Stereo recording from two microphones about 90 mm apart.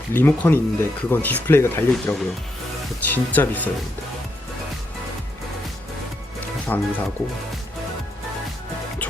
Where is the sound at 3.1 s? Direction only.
20° left (ahead or behind).